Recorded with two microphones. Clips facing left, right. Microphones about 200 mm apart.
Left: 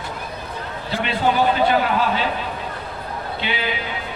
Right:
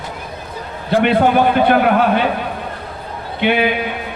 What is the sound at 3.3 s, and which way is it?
Speech, 60° right (ahead or behind).